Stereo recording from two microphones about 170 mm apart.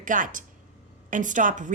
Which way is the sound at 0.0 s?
50° right (ahead or behind).